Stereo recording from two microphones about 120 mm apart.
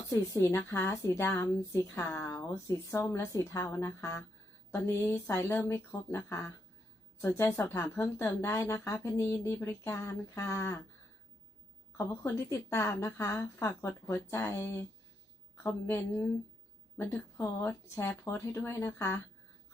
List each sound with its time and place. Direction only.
0.1 s a woman's voice: 25° left (ahead or behind)
11.9 s a woman's voice: 20° left (ahead or behind)